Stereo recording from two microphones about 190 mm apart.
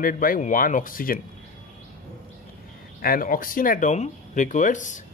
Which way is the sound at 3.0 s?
50° left (ahead or behind).